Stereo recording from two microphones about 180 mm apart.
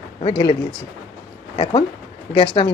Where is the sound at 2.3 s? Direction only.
30° left (ahead or behind).